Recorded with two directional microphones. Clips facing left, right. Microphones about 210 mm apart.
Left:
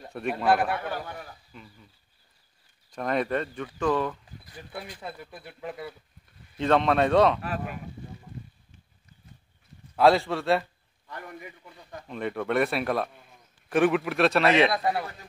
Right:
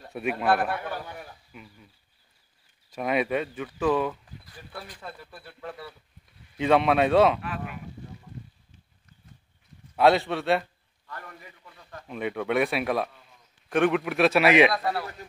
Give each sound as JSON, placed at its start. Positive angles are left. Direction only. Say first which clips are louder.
{"t": 0.1, "sound": "speech", "louder": "right 1 dB", "side_deg": -5}
{"t": 0.5, "sound": "speech", "louder": "left 2 dB", "side_deg": 10}
{"t": 1.5, "sound": "speech", "louder": "right 1 dB", "side_deg": -5}
{"t": 2.9, "sound": "speech", "louder": "right 1 dB", "side_deg": -5}
{"t": 4.7, "sound": "speech", "louder": "left 2 dB", "side_deg": 15}
{"t": 6.6, "sound": "speech", "louder": "right 1 dB", "side_deg": -5}
{"t": 7.4, "sound": "speech", "louder": "left 2 dB", "side_deg": 40}
{"t": 9.9, "sound": "speech", "louder": "even", "side_deg": 0}
{"t": 11.1, "sound": "speech", "louder": "left 3 dB", "side_deg": 15}
{"t": 12.1, "sound": "speech", "louder": "right 1 dB", "side_deg": 0}
{"t": 14.7, "sound": "speech", "louder": "left 1 dB", "side_deg": 20}